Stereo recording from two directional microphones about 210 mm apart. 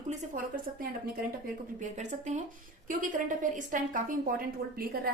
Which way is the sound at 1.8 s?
35° right (ahead or behind).